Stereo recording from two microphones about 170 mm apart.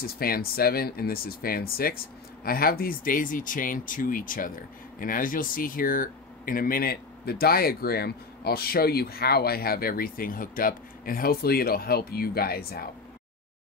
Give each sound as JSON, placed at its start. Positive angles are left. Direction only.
{"t": 0.0, "sound": "speech", "side_deg": 60}